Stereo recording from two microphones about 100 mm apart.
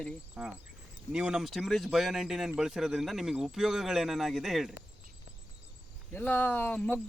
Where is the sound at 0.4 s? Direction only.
5° right (ahead or behind).